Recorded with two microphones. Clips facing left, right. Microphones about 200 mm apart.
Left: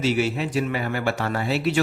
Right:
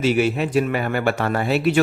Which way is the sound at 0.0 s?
55° right (ahead or behind).